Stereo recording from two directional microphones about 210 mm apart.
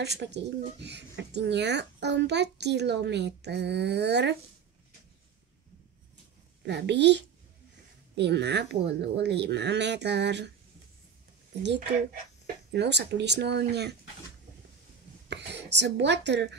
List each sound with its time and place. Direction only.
0.0 s speech: 55° right (ahead or behind)
6.6 s speech: 55° right (ahead or behind)
12.7 s speech: 55° right (ahead or behind)
15.2 s speech: 55° right (ahead or behind)